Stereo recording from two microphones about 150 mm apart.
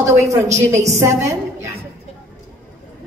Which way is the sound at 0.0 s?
20° right (ahead or behind).